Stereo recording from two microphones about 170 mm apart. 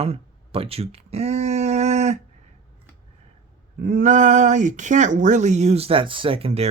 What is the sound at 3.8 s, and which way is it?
Speech, 55° right (ahead or behind).